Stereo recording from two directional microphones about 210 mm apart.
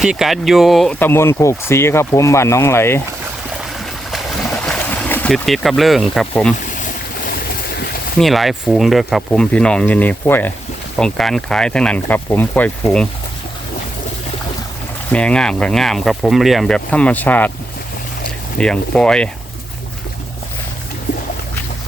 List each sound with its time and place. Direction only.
0.0 s speech: centre (ahead or behind)
3.6 s a sound: centre (ahead or behind)
6.6 s boat: 40° left (ahead or behind)
8.2 s speech: centre (ahead or behind)
15.1 s speech: 5° left (ahead or behind)
18.5 s speech: 5° left (ahead or behind)